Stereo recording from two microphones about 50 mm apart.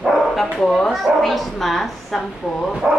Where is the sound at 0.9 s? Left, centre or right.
Centre.